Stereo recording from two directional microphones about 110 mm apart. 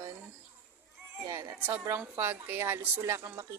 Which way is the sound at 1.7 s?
20° right (ahead or behind).